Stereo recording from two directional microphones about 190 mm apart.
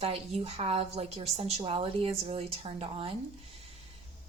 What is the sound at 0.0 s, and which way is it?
A woman's voice, 30° right (ahead or behind).